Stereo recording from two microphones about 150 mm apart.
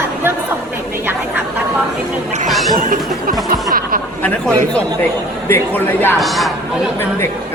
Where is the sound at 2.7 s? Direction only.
65° right (ahead or behind).